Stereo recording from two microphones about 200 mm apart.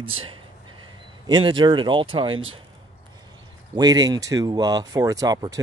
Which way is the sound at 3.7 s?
20° right (ahead or behind).